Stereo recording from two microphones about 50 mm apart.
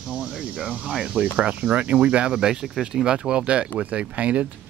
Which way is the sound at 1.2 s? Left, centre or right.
Right.